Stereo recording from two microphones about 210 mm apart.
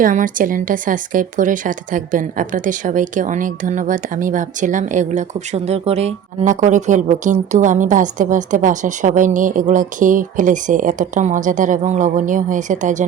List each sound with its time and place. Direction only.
0.0 s speech: 40° right (ahead or behind)